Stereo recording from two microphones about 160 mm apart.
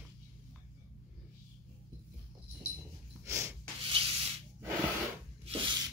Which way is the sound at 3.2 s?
15° right (ahead or behind).